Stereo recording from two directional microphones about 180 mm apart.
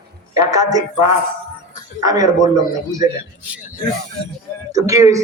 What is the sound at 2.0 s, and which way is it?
Speech, 20° right (ahead or behind).